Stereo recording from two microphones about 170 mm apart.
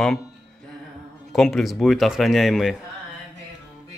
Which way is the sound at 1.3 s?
Centre (ahead or behind).